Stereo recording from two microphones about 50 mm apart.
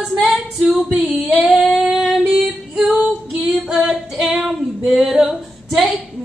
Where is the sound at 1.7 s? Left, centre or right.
Centre.